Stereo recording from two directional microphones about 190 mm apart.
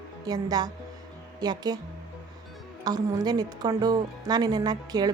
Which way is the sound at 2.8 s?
20° right (ahead or behind).